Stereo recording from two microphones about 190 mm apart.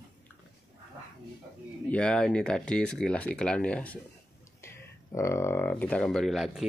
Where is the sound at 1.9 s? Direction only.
5° left (ahead or behind).